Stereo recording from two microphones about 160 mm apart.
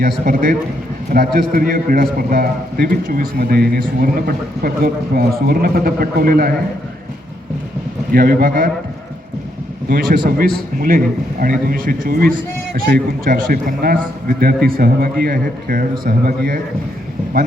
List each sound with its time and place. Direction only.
0.0 s a man's voice: 60° right (ahead or behind)
8.1 s a man's voice: 70° right (ahead or behind)
9.9 s a man's voice: 65° right (ahead or behind)